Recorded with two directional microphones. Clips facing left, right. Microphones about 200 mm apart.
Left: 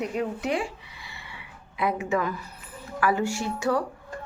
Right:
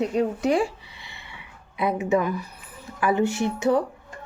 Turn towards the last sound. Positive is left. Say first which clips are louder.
# right 4 dB
turn(degrees=-20)  # may be behind; listen again after turning